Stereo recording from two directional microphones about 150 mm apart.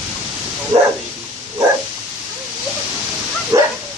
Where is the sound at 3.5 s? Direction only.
25° right (ahead or behind).